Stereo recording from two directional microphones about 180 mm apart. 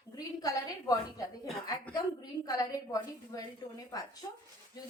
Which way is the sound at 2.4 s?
20° left (ahead or behind).